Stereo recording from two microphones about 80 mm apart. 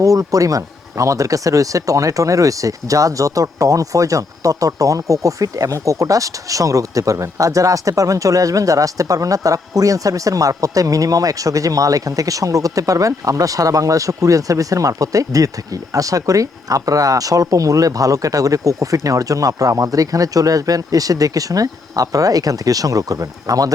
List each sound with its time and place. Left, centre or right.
0.0 s speech: right